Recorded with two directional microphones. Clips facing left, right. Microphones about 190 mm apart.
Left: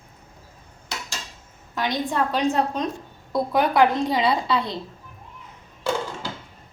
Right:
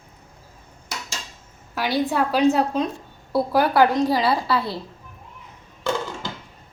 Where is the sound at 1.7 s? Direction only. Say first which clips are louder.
Right 2 dB; 5° right (ahead or behind).